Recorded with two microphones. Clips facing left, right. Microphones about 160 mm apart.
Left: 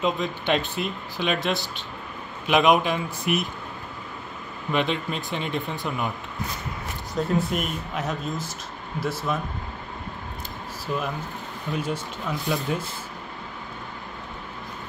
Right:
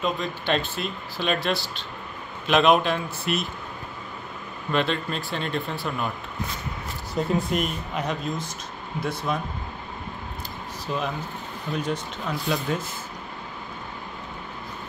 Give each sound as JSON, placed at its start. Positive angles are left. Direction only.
{"t": 0.0, "sound": "speech", "side_deg": 20}
{"t": 4.6, "sound": "speech", "side_deg": 15}
{"t": 7.3, "sound": "speech", "side_deg": 0}
{"t": 10.9, "sound": "speech", "side_deg": 5}